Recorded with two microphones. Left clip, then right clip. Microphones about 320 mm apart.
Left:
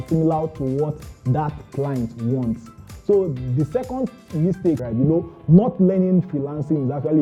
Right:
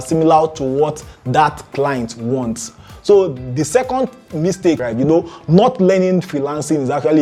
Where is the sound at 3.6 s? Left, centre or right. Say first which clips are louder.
Right 9 dB; centre.